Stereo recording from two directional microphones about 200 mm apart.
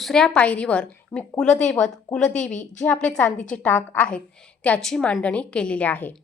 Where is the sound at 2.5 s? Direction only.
35° left (ahead or behind).